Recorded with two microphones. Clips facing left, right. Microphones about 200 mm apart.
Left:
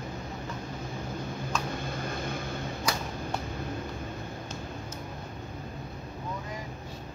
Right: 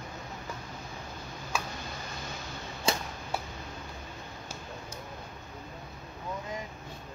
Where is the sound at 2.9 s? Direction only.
25° right (ahead or behind).